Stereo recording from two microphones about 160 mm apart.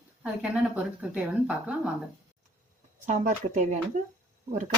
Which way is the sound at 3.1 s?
50° right (ahead or behind).